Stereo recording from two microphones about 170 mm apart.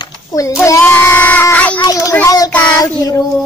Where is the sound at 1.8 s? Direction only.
20° left (ahead or behind).